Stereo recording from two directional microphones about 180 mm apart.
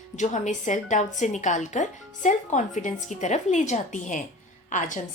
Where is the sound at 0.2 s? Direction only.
40° left (ahead or behind).